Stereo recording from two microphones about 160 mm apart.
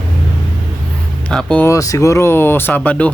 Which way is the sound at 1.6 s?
20° left (ahead or behind).